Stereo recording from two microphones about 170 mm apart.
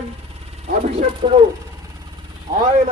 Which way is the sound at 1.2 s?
35° right (ahead or behind).